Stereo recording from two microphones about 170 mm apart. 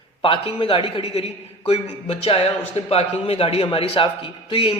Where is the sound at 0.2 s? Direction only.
30° left (ahead or behind).